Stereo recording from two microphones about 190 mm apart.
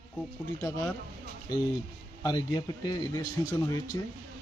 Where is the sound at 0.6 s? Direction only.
15° left (ahead or behind).